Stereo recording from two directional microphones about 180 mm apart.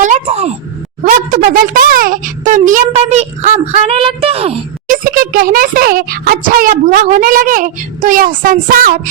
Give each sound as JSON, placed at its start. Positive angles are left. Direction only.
{"t": 0.0, "sound": "speech", "side_deg": -40}
{"t": 1.3, "sound": "a child's voice", "side_deg": -50}
{"t": 4.9, "sound": "a child's voice", "side_deg": -55}